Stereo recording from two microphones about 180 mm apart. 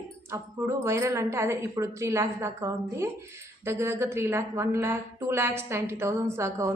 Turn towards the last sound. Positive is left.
turn(degrees=-15)  # may be behind; listen again after turning